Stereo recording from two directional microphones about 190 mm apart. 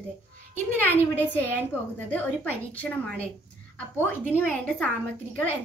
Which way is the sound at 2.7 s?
5° left (ahead or behind).